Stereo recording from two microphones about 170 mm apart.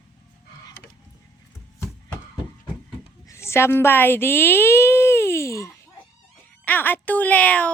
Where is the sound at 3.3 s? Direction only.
15° left (ahead or behind).